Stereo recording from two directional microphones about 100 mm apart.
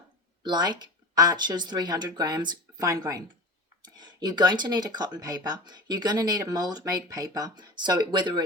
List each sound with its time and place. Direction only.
0.4 s speech: 50° right (ahead or behind)